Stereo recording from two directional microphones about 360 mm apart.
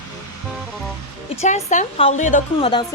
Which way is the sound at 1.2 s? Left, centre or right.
Centre.